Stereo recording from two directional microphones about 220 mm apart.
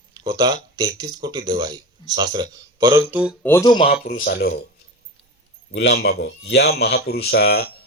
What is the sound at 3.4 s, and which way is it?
Speech, 15° left (ahead or behind).